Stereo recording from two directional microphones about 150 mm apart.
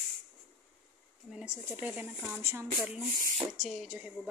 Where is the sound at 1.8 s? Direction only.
10° right (ahead or behind).